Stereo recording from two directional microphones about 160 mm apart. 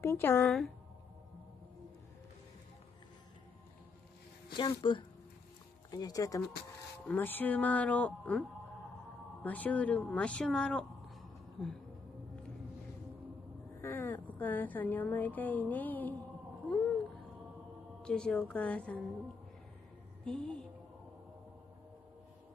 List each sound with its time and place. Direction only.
0.0 s speech: 15° left (ahead or behind)
0.5 s speech: centre (ahead or behind)
4.8 s speech: 30° left (ahead or behind); by 11.7 s 5° left (ahead or behind)
13.7 s speech: 15° left (ahead or behind)
16.7 s a sound: 5° left (ahead or behind)
18.0 s speech: 5° left (ahead or behind)
20.2 s speech: 5° left (ahead or behind)